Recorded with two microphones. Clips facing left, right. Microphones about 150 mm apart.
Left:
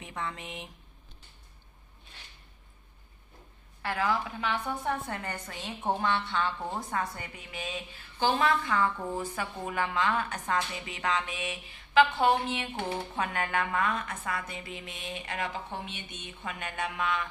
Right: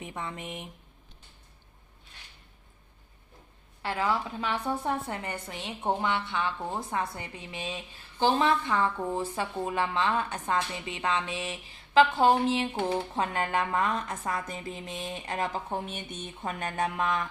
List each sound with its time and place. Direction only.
0.1 s a woman's voice: 20° right (ahead or behind)
3.8 s a woman's voice: 25° right (ahead or behind); by 17.3 s 40° right (ahead or behind)